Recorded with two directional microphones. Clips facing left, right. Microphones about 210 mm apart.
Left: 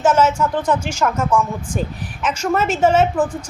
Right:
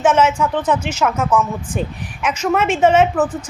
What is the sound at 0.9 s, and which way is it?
A woman's voice, 5° right (ahead or behind).